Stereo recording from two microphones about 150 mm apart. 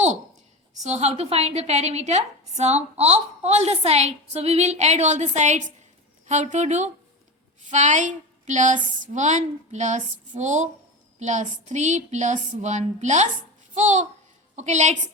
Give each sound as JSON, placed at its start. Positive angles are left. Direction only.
{"t": 0.8, "sound": "a woman's voice", "side_deg": -45}